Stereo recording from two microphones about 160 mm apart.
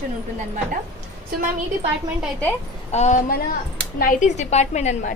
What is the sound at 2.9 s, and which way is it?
A woman's voice, 45° left (ahead or behind).